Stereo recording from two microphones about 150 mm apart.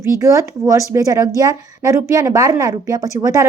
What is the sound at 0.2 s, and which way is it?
Speech, 20° right (ahead or behind).